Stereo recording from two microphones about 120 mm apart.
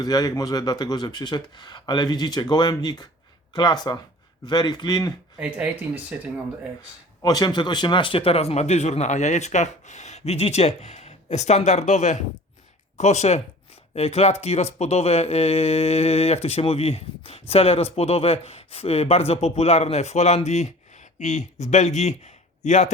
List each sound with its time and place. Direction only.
0.0 s speech: 30° left (ahead or behind)
5.4 s speech: 10° right (ahead or behind)
7.2 s speech: 30° left (ahead or behind); by 22.1 s 70° left (ahead or behind)
22.2 s a sound: 80° left